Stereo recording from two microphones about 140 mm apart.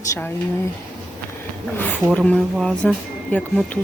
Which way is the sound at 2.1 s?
5° left (ahead or behind).